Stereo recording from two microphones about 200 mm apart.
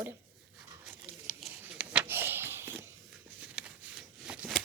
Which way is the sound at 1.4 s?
5° right (ahead or behind).